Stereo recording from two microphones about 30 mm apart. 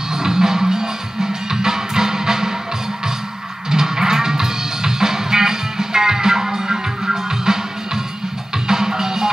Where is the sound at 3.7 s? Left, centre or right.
Centre.